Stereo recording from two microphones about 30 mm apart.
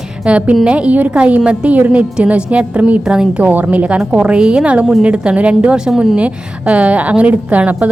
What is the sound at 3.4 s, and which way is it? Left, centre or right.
Speech, right.